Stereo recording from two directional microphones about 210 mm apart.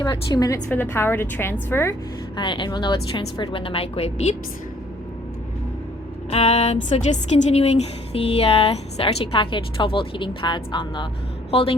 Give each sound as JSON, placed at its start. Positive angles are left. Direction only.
{"t": 0.0, "sound": "a woman's voice", "side_deg": 15}
{"t": 6.3, "sound": "a sound", "side_deg": 30}
{"t": 6.8, "sound": "a woman's voice", "side_deg": 30}